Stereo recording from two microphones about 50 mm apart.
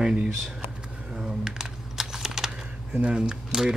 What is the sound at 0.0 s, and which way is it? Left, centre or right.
Speech, centre.